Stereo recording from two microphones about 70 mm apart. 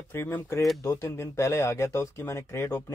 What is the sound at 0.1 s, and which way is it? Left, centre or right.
Speech, left.